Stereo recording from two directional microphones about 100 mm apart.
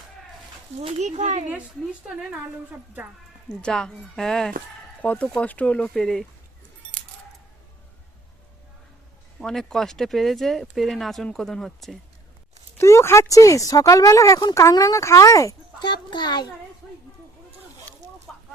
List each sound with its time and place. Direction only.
0.8 s speech: 80° right
3.6 s speech: 5° left (ahead or behind)
9.4 s speech: 5° left (ahead or behind)
12.7 s speech: 30° left (ahead or behind)
15.8 s speech: 45° left (ahead or behind)